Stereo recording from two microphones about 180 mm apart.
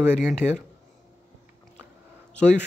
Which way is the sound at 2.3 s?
5° left (ahead or behind).